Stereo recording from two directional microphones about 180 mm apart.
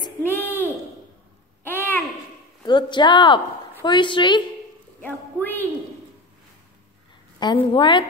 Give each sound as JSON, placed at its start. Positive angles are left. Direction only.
{"t": 0.2, "sound": "a sound", "side_deg": 10}
{"t": 2.6, "sound": "a woman's voice", "side_deg": 25}
{"t": 5.0, "sound": "speech", "side_deg": 10}
{"t": 7.4, "sound": "a woman's voice", "side_deg": 25}